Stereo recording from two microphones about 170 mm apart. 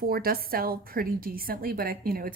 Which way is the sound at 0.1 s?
60° right (ahead or behind).